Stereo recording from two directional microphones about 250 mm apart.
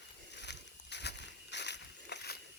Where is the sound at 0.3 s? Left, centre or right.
Left.